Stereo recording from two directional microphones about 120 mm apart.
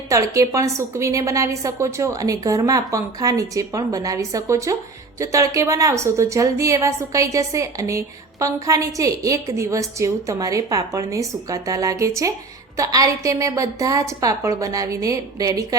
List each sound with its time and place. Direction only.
0.1 s a woman's voice: 25° right (ahead or behind)